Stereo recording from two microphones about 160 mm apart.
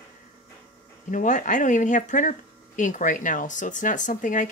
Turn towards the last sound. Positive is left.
turn(degrees=55)  # may be behind; listen again after turning